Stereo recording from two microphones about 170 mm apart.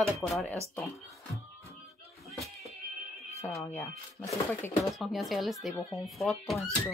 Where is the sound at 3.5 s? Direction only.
15° left (ahead or behind).